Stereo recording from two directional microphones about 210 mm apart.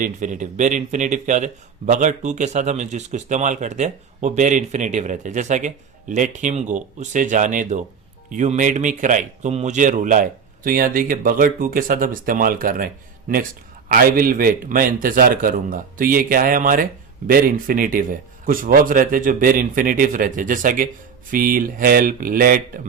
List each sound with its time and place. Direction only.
0.0 s speech: 40° right (ahead or behind)